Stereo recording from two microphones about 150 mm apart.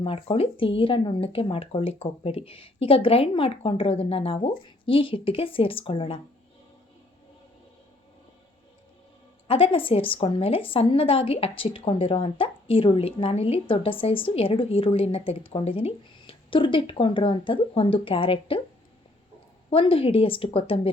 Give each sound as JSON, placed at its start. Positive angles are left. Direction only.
{"t": 0.0, "sound": "a woman's voice", "side_deg": 35}
{"t": 9.5, "sound": "a woman's voice", "side_deg": 35}
{"t": 19.7, "sound": "a woman's voice", "side_deg": 35}